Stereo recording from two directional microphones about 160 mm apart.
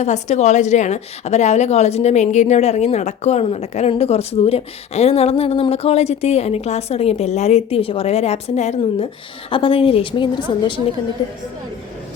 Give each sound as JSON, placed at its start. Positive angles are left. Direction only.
{"t": 0.0, "sound": "a woman's voice", "side_deg": 45}